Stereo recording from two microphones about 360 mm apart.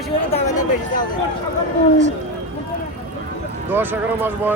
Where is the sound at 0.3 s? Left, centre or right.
Centre.